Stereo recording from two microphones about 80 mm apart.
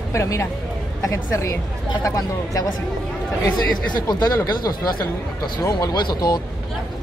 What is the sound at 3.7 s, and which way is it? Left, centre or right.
Speech, left.